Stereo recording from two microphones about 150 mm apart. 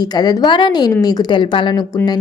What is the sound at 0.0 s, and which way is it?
Speech, 25° left (ahead or behind).